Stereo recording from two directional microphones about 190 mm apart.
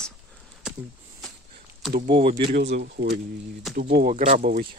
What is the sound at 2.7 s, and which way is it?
Speech, 60° right (ahead or behind).